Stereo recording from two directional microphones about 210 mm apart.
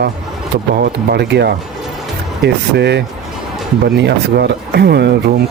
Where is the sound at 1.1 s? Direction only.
55° right (ahead or behind).